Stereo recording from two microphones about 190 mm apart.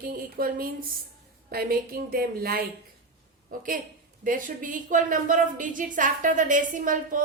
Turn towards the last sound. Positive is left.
turn(degrees=-45)  # may be behind; listen again after turning